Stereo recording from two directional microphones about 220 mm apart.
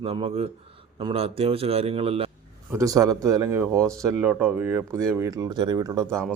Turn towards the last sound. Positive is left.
turn(degrees=-15)  # may be behind; listen again after turning